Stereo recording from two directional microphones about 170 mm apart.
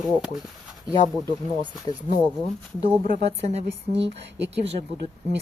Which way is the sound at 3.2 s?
40° right (ahead or behind).